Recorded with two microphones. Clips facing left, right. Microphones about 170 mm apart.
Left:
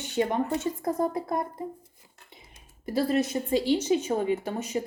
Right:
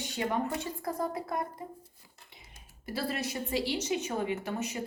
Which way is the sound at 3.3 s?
25° left (ahead or behind).